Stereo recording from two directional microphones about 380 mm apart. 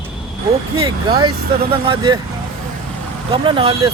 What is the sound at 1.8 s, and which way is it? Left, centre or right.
Speech, centre.